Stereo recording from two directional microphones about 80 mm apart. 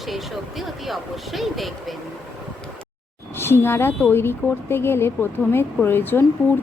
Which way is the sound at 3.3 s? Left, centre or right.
Left.